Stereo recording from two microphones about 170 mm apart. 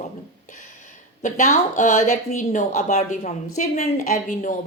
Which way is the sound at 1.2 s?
45° left (ahead or behind).